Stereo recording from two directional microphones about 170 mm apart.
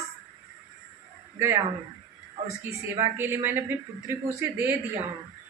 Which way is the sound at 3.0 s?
10° right (ahead or behind).